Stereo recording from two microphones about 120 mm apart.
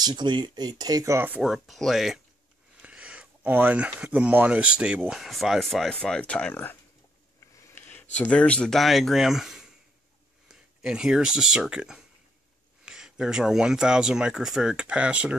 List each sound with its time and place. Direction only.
0.0 s speech: 40° right (ahead or behind); by 1.4 s 20° right (ahead or behind)
1.4 s speech: centre (ahead or behind); by 6.8 s 15° left (ahead or behind)
7.6 s a sound: 20° left (ahead or behind)
8.2 s speech: 10° left (ahead or behind); by 15.3 s 10° right (ahead or behind)